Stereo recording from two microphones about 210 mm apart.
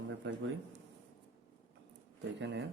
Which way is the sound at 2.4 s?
55° right (ahead or behind).